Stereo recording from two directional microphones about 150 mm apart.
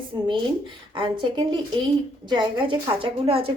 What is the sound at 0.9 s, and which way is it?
Speech, 30° right (ahead or behind).